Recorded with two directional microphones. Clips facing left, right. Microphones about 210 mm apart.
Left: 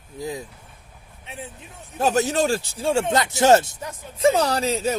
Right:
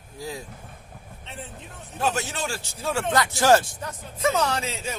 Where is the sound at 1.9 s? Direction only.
40° left (ahead or behind).